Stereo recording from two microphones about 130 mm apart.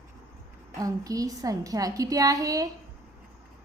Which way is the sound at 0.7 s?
25° right (ahead or behind).